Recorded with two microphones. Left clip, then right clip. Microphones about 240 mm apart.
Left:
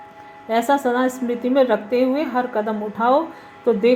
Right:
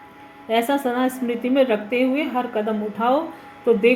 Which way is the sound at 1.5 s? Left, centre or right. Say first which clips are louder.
Left 2 dB; left.